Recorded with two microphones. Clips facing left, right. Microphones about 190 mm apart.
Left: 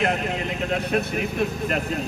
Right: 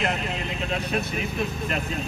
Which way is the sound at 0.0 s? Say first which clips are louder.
Left 4 dB; 55° left (ahead or behind).